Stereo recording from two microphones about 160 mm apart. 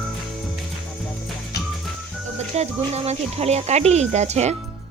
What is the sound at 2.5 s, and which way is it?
Speech, 40° right (ahead or behind).